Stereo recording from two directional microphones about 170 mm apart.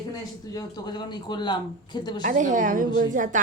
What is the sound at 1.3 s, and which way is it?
Speech, 25° left (ahead or behind).